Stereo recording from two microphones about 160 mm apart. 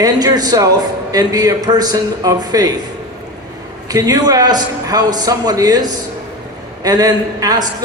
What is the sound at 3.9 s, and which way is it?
A man's voice, 20° right (ahead or behind).